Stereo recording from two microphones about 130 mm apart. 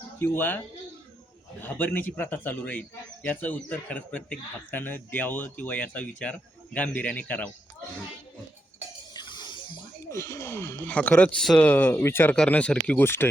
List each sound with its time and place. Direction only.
0.2 s speech: 15° left (ahead or behind)
1.6 s speech: 15° left (ahead or behind)
9.1 s a sound: 35° left (ahead or behind)
10.1 s speech: 20° left (ahead or behind); by 11.7 s 5° left (ahead or behind)
11.7 s speech: 15° left (ahead or behind)